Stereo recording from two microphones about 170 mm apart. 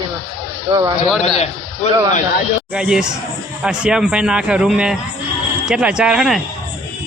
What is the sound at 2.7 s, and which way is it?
A man's voice, 5° right (ahead or behind).